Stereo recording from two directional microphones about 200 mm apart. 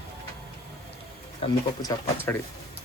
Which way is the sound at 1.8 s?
15° left (ahead or behind).